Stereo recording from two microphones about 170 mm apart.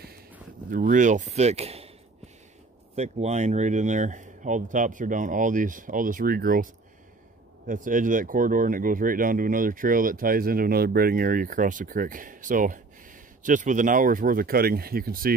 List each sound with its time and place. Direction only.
0.7 s speech: 50° right (ahead or behind)
3.0 s speech: 40° right (ahead or behind); by 15.3 s 60° right (ahead or behind)